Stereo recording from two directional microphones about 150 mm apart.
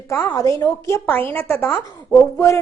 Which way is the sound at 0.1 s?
15° left (ahead or behind).